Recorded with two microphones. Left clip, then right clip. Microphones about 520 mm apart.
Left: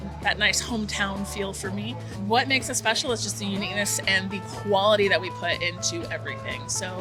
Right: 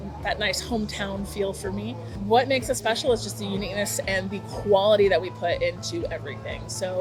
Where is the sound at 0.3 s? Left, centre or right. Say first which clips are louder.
Left 3 dB; left.